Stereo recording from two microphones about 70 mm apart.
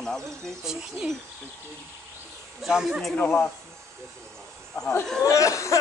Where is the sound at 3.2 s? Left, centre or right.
Left.